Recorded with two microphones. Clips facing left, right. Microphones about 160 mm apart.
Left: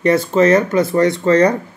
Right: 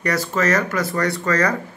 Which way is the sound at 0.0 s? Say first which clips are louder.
Left 8 dB; 25° left (ahead or behind).